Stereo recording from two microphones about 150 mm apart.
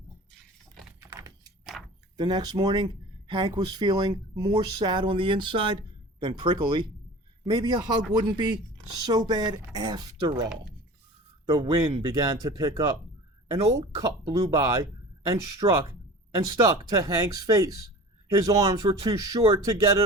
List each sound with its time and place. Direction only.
1.7 s keys jangling: centre (ahead or behind)
2.1 s speech: 30° right (ahead or behind)
11.4 s speech: 30° right (ahead or behind)
12.0 s speech: 25° right (ahead or behind)
16.5 s speech: 20° right (ahead or behind)